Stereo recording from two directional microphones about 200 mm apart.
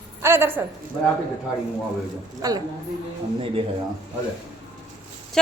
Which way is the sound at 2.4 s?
15° right (ahead or behind).